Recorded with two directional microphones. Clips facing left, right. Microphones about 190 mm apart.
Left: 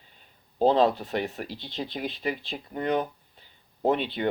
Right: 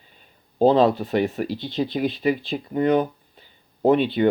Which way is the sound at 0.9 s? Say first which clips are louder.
Right 8 dB; 5° right (ahead or behind).